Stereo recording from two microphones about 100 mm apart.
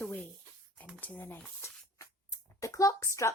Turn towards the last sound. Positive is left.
turn(degrees=30)  # may be behind; listen again after turning